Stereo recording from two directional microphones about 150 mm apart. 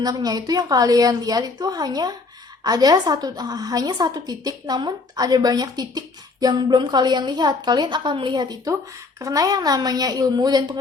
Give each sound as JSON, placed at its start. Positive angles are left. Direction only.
{"t": 0.0, "sound": "a woman's voice", "side_deg": -25}